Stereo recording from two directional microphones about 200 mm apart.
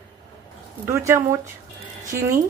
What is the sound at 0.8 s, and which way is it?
A woman's voice, 15° right (ahead or behind).